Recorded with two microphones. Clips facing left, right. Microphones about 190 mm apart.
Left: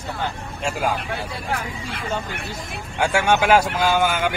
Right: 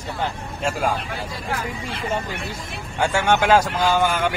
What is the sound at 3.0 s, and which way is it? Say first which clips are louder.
A man's voice: even; 10° left (ahead or behind).